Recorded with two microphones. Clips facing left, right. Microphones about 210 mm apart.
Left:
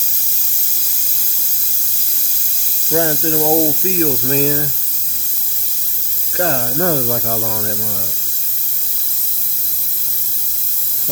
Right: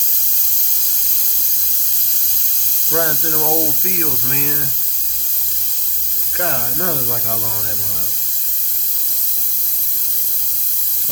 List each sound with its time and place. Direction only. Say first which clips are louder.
2.9 s speech: left 5 dB; 25° left (ahead or behind)
6.3 s speech: left 5 dB; 35° left (ahead or behind)